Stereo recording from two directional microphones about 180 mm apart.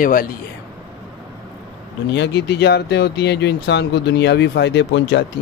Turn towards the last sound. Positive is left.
turn(degrees=75)  # may be behind; listen again after turning